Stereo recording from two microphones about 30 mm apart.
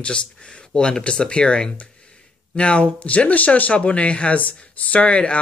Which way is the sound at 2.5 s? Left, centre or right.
Left.